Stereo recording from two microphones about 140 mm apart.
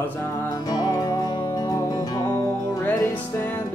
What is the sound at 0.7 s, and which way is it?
Music, 25° left (ahead or behind).